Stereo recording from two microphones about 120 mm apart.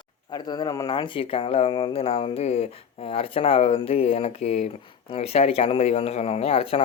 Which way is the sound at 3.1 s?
55° left (ahead or behind).